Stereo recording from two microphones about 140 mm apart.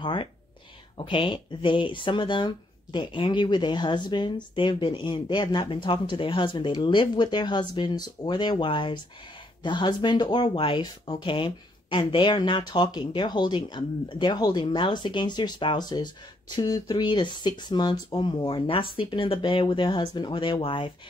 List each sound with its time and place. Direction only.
0.0 s speech: 35° left (ahead or behind)